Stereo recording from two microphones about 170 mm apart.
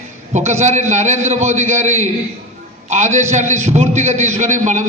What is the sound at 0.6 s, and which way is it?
A man's voice, 45° right (ahead or behind).